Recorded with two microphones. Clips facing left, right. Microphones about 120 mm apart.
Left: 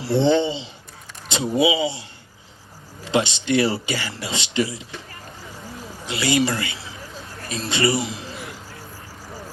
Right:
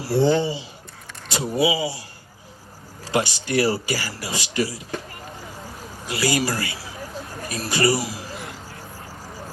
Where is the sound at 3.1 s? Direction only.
25° left (ahead or behind).